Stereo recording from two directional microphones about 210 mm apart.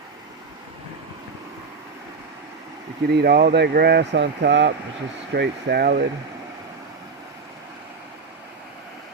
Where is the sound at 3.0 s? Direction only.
50° right (ahead or behind).